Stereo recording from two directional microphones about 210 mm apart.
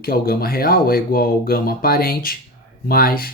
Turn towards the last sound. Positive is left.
turn(degrees=45)  # may be behind; listen again after turning